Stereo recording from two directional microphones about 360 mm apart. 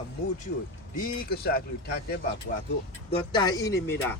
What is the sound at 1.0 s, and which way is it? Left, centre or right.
Speech, left.